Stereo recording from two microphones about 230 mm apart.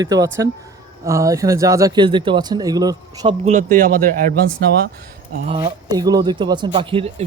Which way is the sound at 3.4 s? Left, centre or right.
Right.